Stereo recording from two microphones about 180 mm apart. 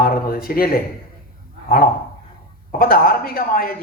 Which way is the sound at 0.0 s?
55° left (ahead or behind).